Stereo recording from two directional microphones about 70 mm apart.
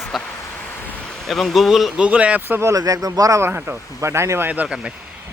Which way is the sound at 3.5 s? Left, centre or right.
Right.